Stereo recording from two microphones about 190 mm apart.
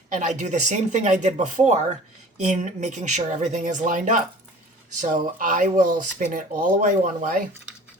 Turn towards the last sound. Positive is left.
turn(degrees=-45)  # may be behind; listen again after turning